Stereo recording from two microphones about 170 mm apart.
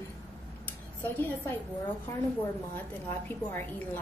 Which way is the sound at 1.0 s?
10° left (ahead or behind).